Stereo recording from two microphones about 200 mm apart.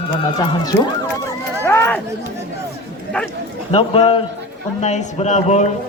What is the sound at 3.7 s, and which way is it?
A man's voice, 30° left (ahead or behind).